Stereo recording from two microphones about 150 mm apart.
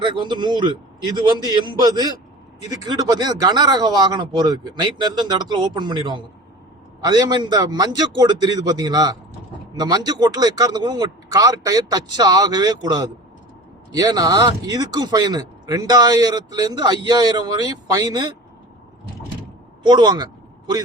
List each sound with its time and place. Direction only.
0.0 s speech: 30° right (ahead or behind)
19.8 s speech: 30° right (ahead or behind)